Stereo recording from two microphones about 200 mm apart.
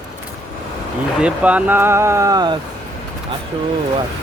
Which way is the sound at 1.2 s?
5° right (ahead or behind).